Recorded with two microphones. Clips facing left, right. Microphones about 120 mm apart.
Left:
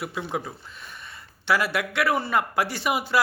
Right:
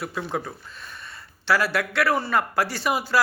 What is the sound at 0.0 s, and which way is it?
A woman's voice, 15° left (ahead or behind).